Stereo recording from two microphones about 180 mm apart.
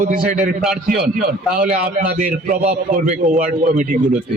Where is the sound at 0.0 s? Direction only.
45° right (ahead or behind).